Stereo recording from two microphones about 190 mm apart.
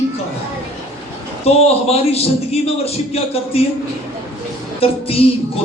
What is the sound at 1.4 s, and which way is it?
A man's voice, 30° left (ahead or behind).